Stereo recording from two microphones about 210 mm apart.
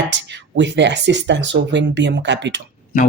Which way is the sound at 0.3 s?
55° right (ahead or behind).